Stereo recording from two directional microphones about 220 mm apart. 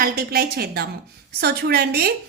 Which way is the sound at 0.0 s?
45° right (ahead or behind).